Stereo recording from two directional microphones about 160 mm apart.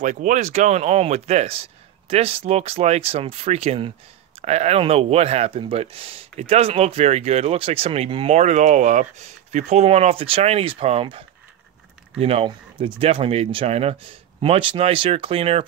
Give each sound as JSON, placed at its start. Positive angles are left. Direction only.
{"t": 0.0, "sound": "speech", "side_deg": -50}